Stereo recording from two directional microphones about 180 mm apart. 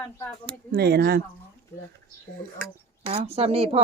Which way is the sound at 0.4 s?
60° right (ahead or behind).